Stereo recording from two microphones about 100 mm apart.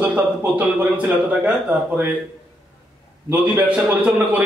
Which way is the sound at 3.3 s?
15° right (ahead or behind).